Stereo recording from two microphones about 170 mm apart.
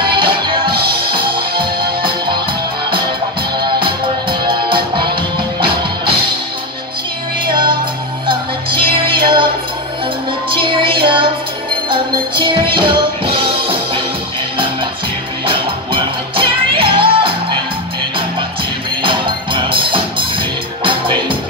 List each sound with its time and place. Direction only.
0.0 s music: 30° right (ahead or behind)
3.5 s music: 30° right (ahead or behind)
8.3 s music: 30° right (ahead or behind)
10.5 s music: 30° right (ahead or behind)
15.4 s music: 30° right (ahead or behind)
19.0 s music: 30° right (ahead or behind)